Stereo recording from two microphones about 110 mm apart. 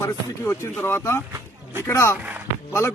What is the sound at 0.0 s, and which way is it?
A man's voice, 25° left (ahead or behind).